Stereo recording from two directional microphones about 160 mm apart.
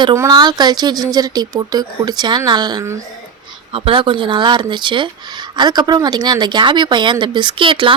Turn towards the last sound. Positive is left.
turn(degrees=-30)  # may be behind; listen again after turning